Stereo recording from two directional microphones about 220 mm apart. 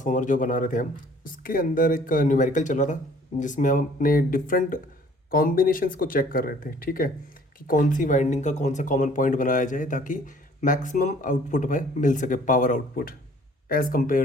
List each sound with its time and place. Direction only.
0.0 s speech: 35° left (ahead or behind)